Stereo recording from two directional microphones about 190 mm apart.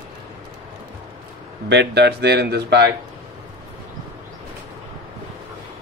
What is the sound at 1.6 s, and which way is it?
Speech, 60° right (ahead or behind).